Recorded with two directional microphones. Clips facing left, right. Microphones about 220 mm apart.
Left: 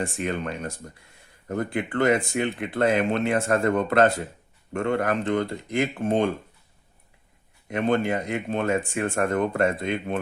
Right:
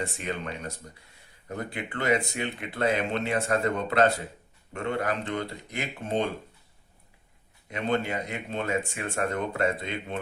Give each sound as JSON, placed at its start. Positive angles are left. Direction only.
{"t": 0.0, "sound": "speech", "side_deg": 50}
{"t": 7.7, "sound": "speech", "side_deg": 50}